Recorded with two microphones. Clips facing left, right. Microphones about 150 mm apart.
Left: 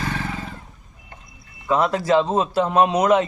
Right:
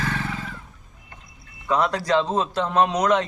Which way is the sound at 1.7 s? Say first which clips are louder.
Left 3 dB; 5° left (ahead or behind).